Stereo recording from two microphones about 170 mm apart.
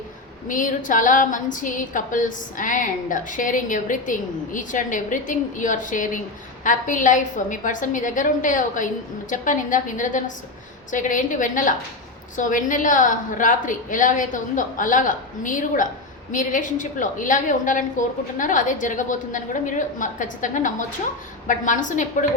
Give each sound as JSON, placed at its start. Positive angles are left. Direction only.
{"t": 0.4, "sound": "a woman's voice", "side_deg": 50}